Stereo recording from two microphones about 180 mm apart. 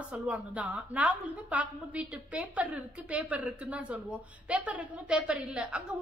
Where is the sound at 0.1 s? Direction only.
10° right (ahead or behind).